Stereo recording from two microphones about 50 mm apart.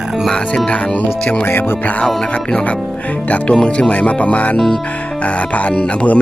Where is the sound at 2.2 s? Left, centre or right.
Centre.